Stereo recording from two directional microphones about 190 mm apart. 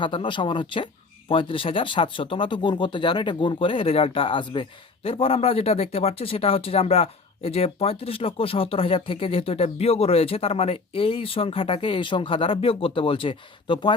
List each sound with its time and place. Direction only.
0.0 s speech: 25° left (ahead or behind)